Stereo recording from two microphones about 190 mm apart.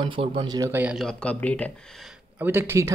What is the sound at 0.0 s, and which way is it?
Speech, 25° right (ahead or behind).